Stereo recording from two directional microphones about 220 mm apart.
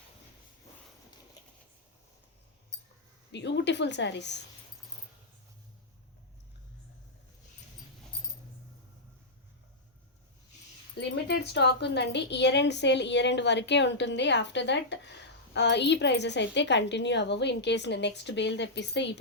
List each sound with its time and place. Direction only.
3.3 s a woman's voice: 55° left (ahead or behind)
10.9 s a woman's voice: 50° left (ahead or behind)